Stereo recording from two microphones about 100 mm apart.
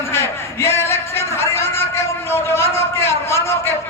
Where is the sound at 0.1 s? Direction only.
25° left (ahead or behind).